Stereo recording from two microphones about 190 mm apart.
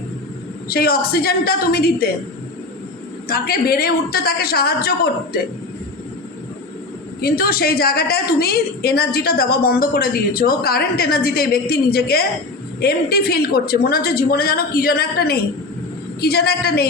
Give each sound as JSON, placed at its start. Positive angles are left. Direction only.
{"t": 0.7, "sound": "a woman's voice", "side_deg": 55}
{"t": 3.2, "sound": "a woman's voice", "side_deg": 50}
{"t": 7.2, "sound": "a woman's voice", "side_deg": 50}